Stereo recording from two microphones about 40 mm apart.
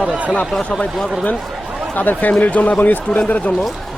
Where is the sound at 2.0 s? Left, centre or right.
Left.